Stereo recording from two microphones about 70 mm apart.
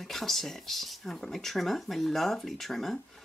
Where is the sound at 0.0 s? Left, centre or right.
Centre.